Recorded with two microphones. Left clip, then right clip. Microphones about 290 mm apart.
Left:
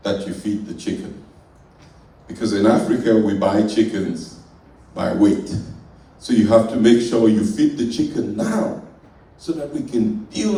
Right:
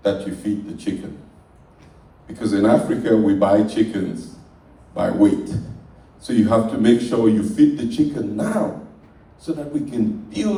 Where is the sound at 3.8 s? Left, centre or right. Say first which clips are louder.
Left 2 dB; right.